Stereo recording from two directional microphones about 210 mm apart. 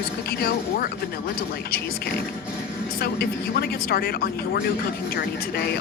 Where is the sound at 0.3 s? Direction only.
45° left (ahead or behind).